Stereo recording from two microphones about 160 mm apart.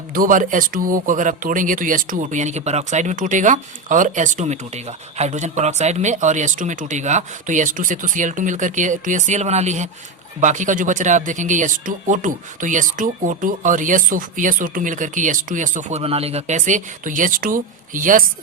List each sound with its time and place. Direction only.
0.1 s speech: 60° right (ahead or behind)